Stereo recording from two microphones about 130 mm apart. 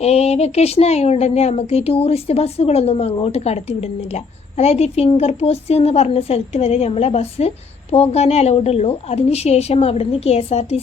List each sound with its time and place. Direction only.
0.0 s speech: 55° left (ahead or behind)